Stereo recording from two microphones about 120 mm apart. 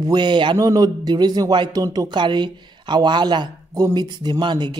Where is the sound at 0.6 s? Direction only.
30° right (ahead or behind).